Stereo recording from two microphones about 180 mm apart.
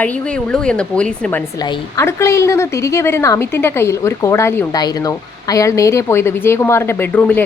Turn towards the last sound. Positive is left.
turn(degrees=10)  # may be behind; listen again after turning